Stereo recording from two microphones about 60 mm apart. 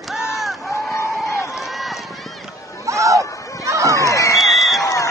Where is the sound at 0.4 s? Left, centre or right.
Centre.